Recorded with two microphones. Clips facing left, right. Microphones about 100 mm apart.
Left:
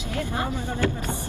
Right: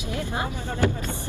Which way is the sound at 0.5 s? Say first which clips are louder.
Even; 15° left (ahead or behind).